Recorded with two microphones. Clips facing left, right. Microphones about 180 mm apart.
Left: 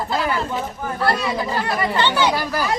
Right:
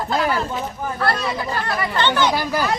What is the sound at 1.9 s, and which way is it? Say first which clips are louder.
Speech: right 1 dB; 10° left (ahead or behind).